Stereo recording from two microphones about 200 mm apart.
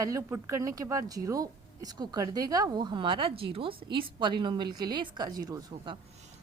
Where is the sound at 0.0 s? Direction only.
15° right (ahead or behind).